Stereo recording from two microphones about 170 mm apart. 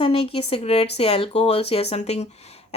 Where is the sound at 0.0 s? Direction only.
35° left (ahead or behind).